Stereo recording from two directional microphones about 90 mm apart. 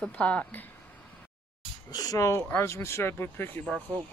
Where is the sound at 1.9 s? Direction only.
45° left (ahead or behind).